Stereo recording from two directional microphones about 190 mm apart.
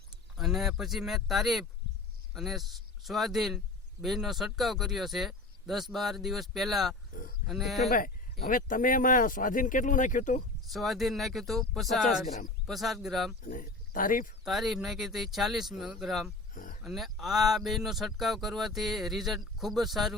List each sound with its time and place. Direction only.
0.3 s speech: centre (ahead or behind)
7.1 s grunt: 50° left (ahead or behind)
7.4 s speech: centre (ahead or behind)
7.9 s speech: 45° left (ahead or behind)
10.7 s speech: centre (ahead or behind)
13.4 s speech: 45° left (ahead or behind)
14.4 s speech: centre (ahead or behind)
16.6 s a sound: 45° left (ahead or behind)
16.8 s speech: centre (ahead or behind)